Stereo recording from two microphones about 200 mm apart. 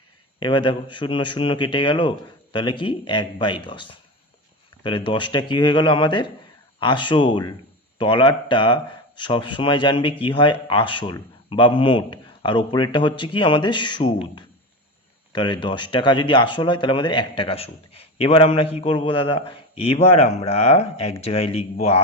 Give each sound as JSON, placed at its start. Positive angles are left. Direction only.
{"t": 0.3, "sound": "speech", "side_deg": 25}